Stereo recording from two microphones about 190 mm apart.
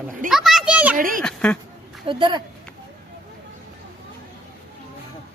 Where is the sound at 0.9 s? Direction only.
45° right (ahead or behind).